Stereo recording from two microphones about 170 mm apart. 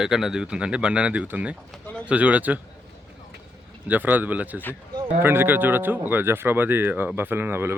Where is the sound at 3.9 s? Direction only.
10° right (ahead or behind).